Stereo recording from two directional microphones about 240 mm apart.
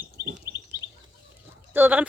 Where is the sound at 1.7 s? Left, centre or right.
Centre.